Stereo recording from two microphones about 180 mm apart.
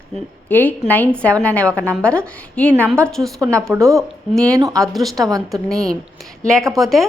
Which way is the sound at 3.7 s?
15° right (ahead or behind).